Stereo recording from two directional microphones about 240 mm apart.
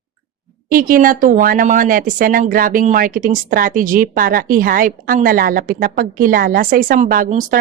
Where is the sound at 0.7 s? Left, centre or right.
Right.